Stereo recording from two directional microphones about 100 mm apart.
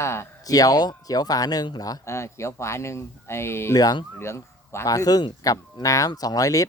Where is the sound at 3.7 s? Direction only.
40° left (ahead or behind).